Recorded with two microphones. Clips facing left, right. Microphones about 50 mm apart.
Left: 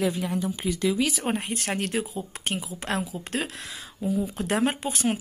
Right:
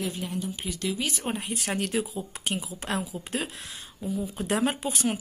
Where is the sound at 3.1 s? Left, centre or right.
Left.